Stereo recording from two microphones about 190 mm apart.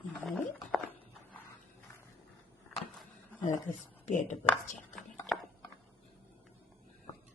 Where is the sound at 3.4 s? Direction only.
40° left (ahead or behind).